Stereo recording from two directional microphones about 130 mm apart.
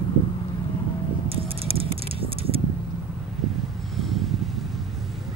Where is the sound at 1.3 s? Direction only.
45° right (ahead or behind).